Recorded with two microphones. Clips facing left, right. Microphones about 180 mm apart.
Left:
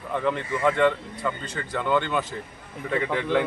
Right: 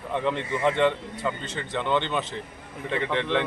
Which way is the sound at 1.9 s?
25° right (ahead or behind).